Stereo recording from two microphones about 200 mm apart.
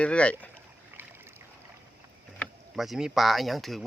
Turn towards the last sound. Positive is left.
turn(degrees=0)  # may be behind; listen again after turning